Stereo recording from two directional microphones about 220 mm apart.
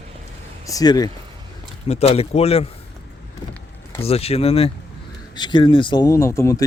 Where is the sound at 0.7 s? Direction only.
15° left (ahead or behind).